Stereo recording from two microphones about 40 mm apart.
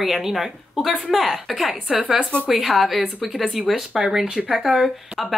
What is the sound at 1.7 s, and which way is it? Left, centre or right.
Speech, centre.